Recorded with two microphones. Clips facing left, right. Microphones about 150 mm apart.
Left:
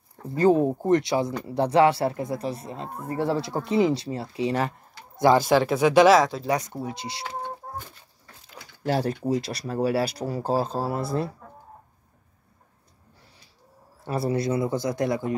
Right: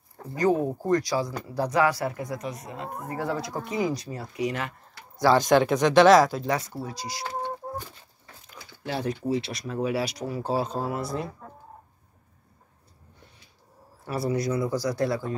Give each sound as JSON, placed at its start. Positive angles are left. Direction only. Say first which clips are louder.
{"t": 0.4, "sound": "speech", "louder": "left 4 dB", "side_deg": 25}
{"t": 5.2, "sound": "speech", "louder": "left 2 dB", "side_deg": 15}
{"t": 5.5, "sound": "speech", "louder": "even", "side_deg": 0}
{"t": 6.5, "sound": "speech", "louder": "left 2 dB", "side_deg": 20}
{"t": 8.8, "sound": "speech", "louder": "left 4 dB", "side_deg": 40}
{"t": 14.0, "sound": "speech", "louder": "left 2 dB", "side_deg": 25}